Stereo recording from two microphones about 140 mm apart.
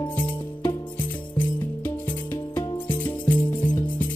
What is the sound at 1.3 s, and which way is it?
Music, 15° left (ahead or behind).